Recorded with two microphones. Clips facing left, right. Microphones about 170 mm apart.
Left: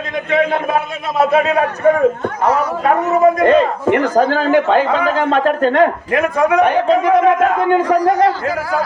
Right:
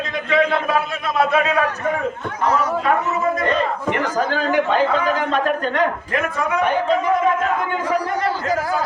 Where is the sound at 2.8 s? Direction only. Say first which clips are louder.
Left 7 dB; 45° left (ahead or behind).